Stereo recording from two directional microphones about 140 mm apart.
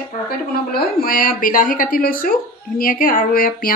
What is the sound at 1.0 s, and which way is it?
Speech, 90° left.